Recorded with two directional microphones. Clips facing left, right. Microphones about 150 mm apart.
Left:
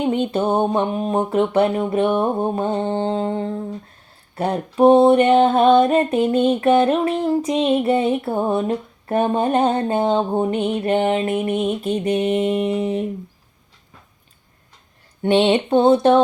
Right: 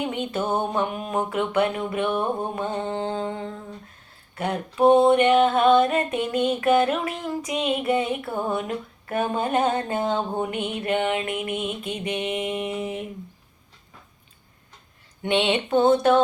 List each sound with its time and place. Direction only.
0.0 s female singing: 35° left (ahead or behind)
15.2 s female singing: 35° left (ahead or behind)